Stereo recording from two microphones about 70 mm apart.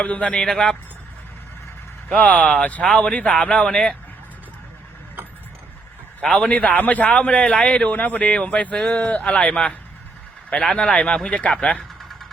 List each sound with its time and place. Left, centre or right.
0.0 s a man's voice: centre
2.0 s a man's voice: left
6.2 s a man's voice: centre